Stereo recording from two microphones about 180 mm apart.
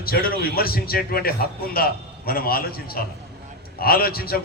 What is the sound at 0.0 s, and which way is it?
A man's voice, 55° left (ahead or behind).